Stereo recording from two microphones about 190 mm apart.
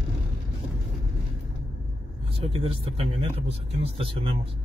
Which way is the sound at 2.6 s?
30° right (ahead or behind).